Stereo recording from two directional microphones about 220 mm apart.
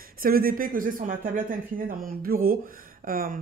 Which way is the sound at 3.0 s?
40° right (ahead or behind).